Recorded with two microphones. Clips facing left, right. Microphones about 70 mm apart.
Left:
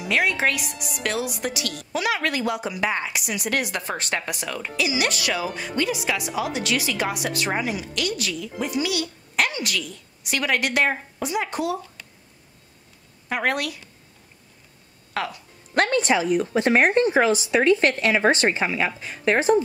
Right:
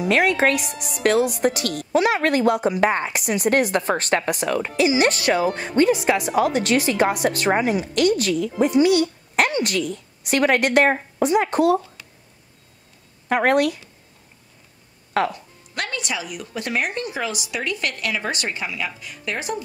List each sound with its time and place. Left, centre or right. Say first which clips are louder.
0.0 s a woman's voice: right 4 dB; right
13.3 s a woman's voice: right 7 dB; right
15.1 s a woman's voice: right 7 dB; right
15.7 s speech: left 8 dB; left